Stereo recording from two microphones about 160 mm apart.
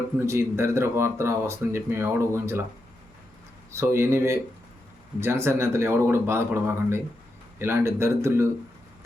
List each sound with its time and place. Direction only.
0.2 s speech: 15° right (ahead or behind)
3.7 s speech: 15° right (ahead or behind)